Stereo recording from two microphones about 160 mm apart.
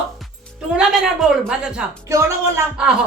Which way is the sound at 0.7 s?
5° right (ahead or behind).